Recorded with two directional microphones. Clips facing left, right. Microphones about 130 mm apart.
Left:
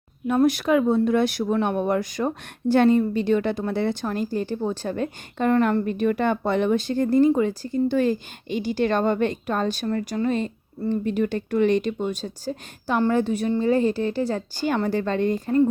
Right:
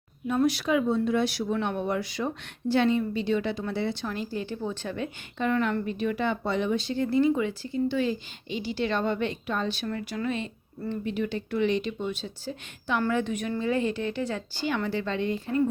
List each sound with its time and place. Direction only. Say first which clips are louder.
0.3 s a woman's voice: left 5 dB; 50° left (ahead or behind)